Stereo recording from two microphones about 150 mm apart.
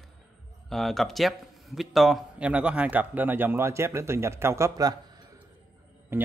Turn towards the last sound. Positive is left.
turn(degrees=-15)  # may be behind; listen again after turning